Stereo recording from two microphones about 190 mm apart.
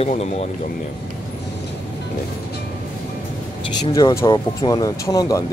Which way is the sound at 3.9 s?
20° left (ahead or behind).